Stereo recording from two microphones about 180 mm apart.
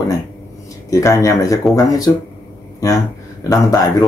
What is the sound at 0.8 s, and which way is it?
Speech, 20° left (ahead or behind).